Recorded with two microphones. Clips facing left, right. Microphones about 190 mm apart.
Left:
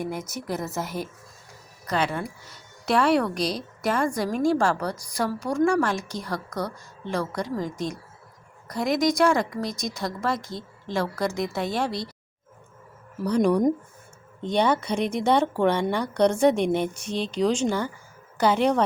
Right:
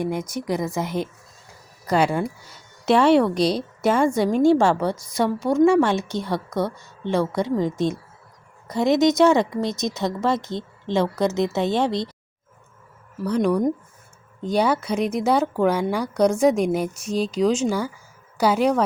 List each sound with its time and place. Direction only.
0.5 s speech: 15° right (ahead or behind)
1.9 s speech: 30° right (ahead or behind)
13.2 s speech: centre (ahead or behind)